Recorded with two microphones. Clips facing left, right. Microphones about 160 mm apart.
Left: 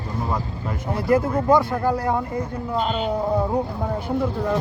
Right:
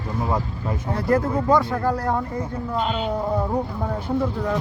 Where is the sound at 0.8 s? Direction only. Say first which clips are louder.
Left 1 dB; 5° left (ahead or behind).